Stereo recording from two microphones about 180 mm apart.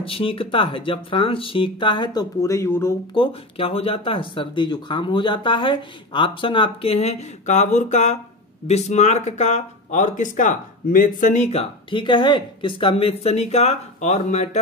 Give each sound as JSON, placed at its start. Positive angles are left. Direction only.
{"t": 0.0, "sound": "speech", "side_deg": 30}
{"t": 3.2, "sound": "speech", "side_deg": 30}